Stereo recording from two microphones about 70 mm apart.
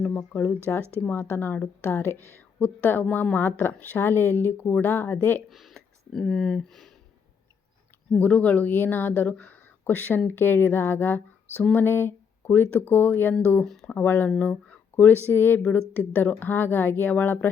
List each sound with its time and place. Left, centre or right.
0.2 s a woman's voice: left
5.5 s speech: centre
8.1 s a woman's voice: left